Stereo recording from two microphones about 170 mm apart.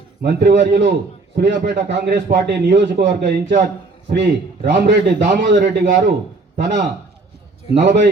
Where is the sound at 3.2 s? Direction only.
90° right.